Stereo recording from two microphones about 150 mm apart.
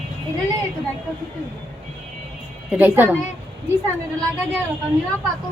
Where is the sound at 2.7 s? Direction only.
10° right (ahead or behind).